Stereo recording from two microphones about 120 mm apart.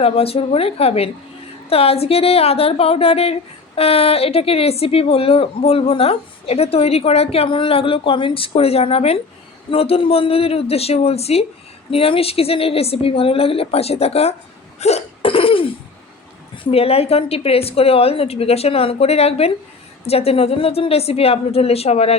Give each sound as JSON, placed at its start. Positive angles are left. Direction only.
{"t": 0.0, "sound": "a woman's voice", "side_deg": 55}
{"t": 14.8, "sound": "hiccup", "side_deg": 65}
{"t": 16.7, "sound": "a woman's voice", "side_deg": 55}